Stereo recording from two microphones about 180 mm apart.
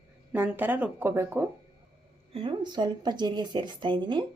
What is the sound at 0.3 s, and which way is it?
Speech, 10° right (ahead or behind).